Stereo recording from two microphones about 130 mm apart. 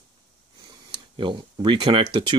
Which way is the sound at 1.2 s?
40° right (ahead or behind).